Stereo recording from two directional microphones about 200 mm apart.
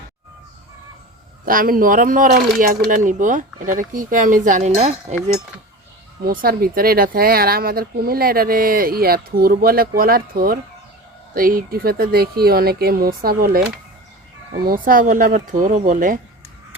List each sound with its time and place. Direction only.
1.5 s speech: 45° right (ahead or behind)
6.2 s speech: 45° right (ahead or behind)
14.7 s speech: 45° right (ahead or behind)